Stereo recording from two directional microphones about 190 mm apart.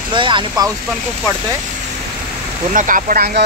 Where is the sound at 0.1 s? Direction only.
25° right (ahead or behind).